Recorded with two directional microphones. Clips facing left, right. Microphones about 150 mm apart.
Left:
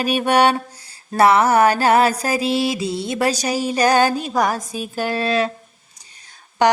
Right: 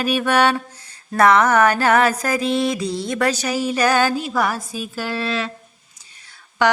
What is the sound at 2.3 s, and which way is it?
Mantra, 10° left (ahead or behind).